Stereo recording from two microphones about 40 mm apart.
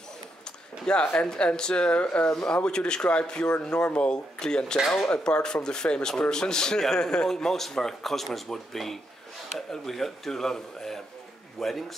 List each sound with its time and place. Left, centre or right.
0.9 s a man's voice: left; by 11.7 s centre